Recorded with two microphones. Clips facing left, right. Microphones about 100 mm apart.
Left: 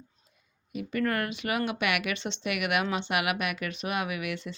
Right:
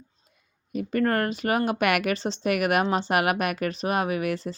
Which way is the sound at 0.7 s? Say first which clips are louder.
Right 5 dB; 40° right (ahead or behind).